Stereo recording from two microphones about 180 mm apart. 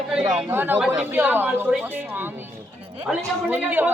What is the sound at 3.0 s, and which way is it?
Chatter, 10° right (ahead or behind).